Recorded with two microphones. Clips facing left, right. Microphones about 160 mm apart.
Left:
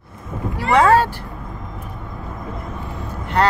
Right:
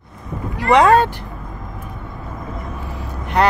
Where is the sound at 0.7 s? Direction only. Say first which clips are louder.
Right 1 dB; 15° right (ahead or behind).